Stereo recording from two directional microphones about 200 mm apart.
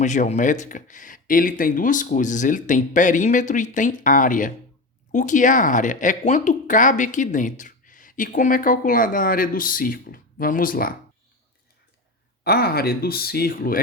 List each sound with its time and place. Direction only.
0.0 s speech: 35° left (ahead or behind)
12.4 s speech: 50° left (ahead or behind)